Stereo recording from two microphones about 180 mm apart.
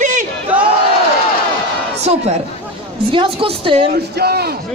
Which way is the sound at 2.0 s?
35° right (ahead or behind).